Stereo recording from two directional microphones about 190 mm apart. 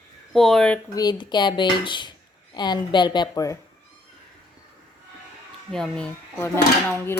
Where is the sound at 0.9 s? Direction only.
20° left (ahead or behind).